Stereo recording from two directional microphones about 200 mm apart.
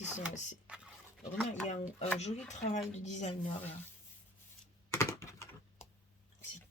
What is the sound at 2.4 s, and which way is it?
Speech, 35° left (ahead or behind).